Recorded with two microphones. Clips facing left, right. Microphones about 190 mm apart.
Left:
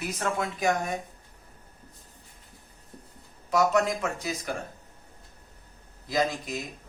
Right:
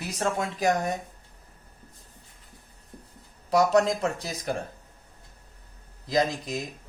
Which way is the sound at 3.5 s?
35° right (ahead or behind).